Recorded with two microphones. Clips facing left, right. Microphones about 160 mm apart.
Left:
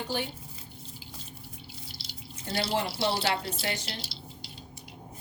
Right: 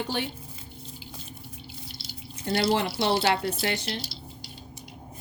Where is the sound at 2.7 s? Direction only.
75° right (ahead or behind).